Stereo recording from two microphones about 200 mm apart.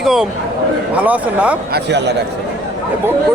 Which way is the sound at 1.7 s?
60° right (ahead or behind).